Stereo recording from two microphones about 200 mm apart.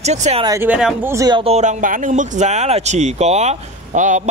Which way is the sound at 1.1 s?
20° right (ahead or behind).